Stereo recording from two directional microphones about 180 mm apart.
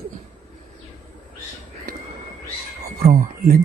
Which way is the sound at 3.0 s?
50° right (ahead or behind).